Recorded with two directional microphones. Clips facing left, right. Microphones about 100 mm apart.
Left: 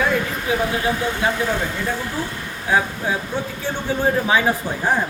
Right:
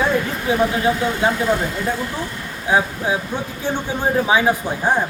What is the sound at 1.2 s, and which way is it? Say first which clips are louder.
Speech: right 3 dB; 25° right (ahead or behind).